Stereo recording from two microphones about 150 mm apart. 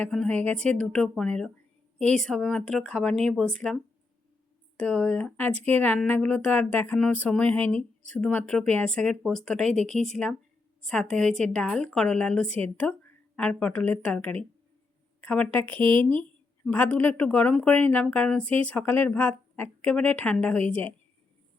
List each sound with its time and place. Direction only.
0.0 s speech: 5° left (ahead or behind)
4.8 s speech: 10° left (ahead or behind)
15.8 s a woman's voice: 35° right (ahead or behind)
16.2 s speech: 10° left (ahead or behind)